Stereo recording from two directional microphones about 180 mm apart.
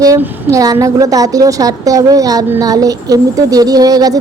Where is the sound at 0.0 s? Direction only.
20° right (ahead or behind).